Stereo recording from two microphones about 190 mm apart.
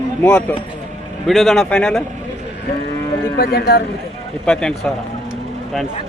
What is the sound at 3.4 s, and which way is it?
Speech, 55° left (ahead or behind).